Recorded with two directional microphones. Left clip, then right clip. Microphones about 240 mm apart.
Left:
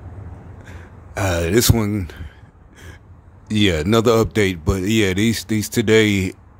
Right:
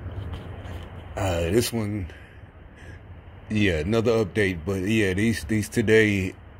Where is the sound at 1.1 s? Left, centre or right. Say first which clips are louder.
Left 5 dB; left.